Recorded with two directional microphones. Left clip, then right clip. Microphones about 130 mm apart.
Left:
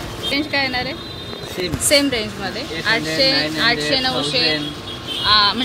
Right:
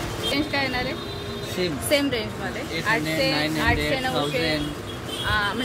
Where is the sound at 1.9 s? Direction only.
90° left.